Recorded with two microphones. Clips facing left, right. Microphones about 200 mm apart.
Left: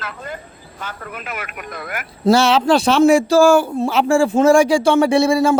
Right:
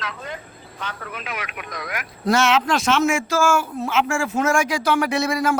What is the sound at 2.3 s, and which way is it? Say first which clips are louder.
Speech: left 6 dB; 30° left (ahead or behind).